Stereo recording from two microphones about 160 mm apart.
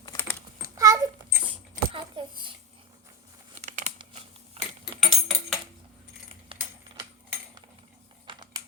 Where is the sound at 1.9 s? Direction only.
30° right (ahead or behind).